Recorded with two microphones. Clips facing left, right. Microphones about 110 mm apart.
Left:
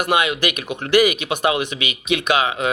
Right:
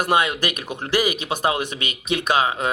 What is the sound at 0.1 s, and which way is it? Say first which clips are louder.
Speech: left 1 dB; 40° right (ahead or behind).